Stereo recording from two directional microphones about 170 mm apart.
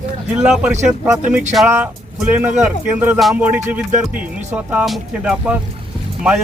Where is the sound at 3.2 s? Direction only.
Centre (ahead or behind).